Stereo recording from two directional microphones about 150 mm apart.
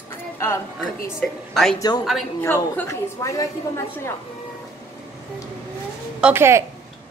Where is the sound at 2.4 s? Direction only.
15° left (ahead or behind).